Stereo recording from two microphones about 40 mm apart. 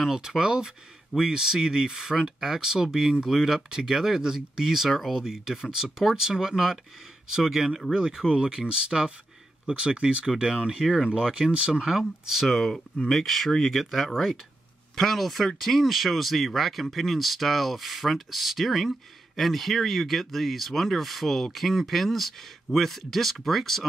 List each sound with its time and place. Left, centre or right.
0.4 s speech: centre
5.2 s speech: centre
8.3 s speech: right
10.8 s speech: centre
11.3 s speech: right
11.9 s speech: centre
12.4 s speech: centre